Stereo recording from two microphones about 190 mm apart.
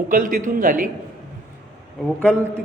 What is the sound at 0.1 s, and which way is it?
Speech, 45° right (ahead or behind).